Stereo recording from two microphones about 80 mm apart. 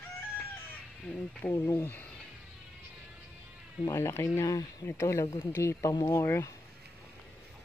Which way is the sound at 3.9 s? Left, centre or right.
Left.